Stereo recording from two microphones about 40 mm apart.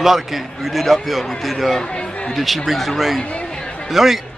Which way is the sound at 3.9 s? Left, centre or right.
Centre.